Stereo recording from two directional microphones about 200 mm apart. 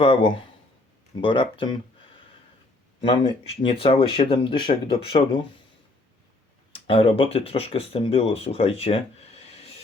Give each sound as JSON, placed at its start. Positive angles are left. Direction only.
{"t": 0.0, "sound": "speech", "side_deg": 25}
{"t": 3.0, "sound": "speech", "side_deg": 25}
{"t": 6.7, "sound": "speech", "side_deg": 25}